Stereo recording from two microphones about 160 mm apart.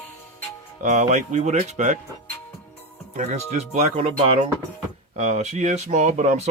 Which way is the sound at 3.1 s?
45° right (ahead or behind).